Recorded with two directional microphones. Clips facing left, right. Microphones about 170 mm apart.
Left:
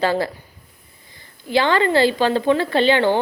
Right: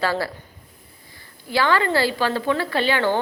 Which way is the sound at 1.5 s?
20° left (ahead or behind).